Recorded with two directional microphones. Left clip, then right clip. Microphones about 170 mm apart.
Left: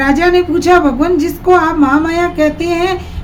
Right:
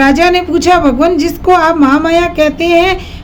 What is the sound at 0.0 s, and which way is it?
Speech, 45° right (ahead or behind).